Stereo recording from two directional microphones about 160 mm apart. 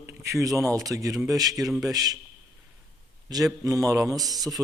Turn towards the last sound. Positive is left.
turn(degrees=-25)  # may be behind; listen again after turning